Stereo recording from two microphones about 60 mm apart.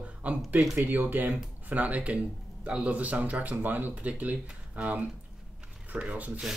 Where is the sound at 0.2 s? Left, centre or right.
Right.